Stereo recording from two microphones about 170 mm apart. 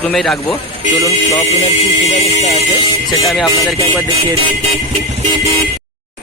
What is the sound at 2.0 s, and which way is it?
Speech, 40° left (ahead or behind).